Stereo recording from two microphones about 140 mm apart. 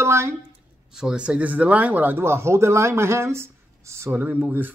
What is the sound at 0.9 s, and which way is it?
Speech, 5° right (ahead or behind).